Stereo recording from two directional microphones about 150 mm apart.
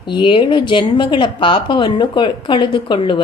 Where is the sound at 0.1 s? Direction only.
35° left (ahead or behind).